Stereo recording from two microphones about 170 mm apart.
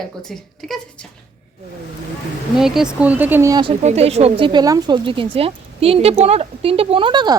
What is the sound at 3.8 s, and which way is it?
A woman's voice, 40° right (ahead or behind).